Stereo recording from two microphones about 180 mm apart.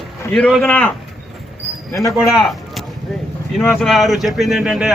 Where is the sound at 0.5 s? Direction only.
5° left (ahead or behind).